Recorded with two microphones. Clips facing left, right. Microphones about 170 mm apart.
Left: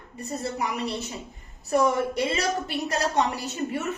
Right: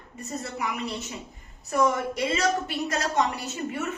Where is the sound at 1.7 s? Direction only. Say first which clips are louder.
Left 2 dB; 35° left (ahead or behind).